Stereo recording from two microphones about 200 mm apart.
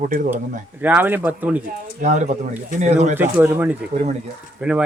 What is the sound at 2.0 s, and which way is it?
Speech, 35° right (ahead or behind).